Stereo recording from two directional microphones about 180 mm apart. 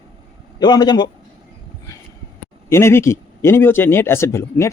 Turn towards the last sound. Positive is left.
turn(degrees=15)  # may be behind; listen again after turning